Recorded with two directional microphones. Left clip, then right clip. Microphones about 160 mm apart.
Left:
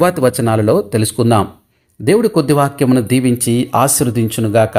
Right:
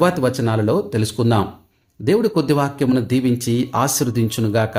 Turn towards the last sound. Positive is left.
turn(degrees=20)  # may be behind; listen again after turning